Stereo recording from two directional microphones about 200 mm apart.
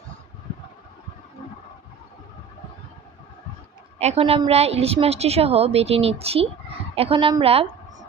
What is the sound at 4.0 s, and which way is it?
A woman's voice, 30° right (ahead or behind).